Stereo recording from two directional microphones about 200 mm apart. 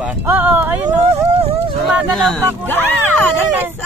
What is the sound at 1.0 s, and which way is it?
Speech, 30° right (ahead or behind).